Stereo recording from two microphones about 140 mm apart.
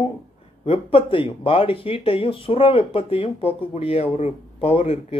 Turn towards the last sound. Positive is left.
turn(degrees=45)  # may be behind; listen again after turning